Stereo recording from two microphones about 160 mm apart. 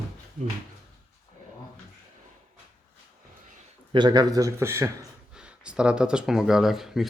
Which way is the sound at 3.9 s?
30° right (ahead or behind).